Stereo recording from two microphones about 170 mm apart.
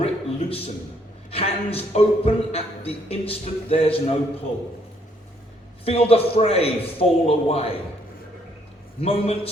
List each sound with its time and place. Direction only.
0.0 s a sound: 35° left (ahead or behind)
1.3 s speech: 35° left (ahead or behind)
5.8 s speech: 35° left (ahead or behind)
9.0 s speech: 35° left (ahead or behind)